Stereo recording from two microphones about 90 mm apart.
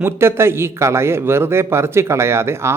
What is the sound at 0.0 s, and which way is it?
A man's voice, 25° right (ahead or behind).